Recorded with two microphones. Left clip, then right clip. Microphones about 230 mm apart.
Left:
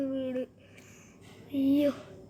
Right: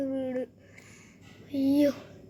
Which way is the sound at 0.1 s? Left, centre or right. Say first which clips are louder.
Right 1 dB; right.